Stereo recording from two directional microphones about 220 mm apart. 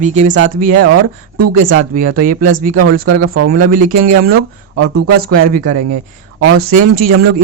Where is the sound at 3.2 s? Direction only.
75° right (ahead or behind).